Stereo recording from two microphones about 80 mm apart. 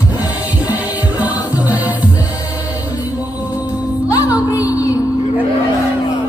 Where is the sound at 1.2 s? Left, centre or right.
Centre.